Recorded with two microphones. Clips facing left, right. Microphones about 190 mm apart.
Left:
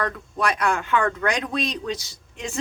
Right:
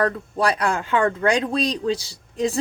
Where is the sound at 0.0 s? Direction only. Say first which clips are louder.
Right 4 dB; 30° right (ahead or behind).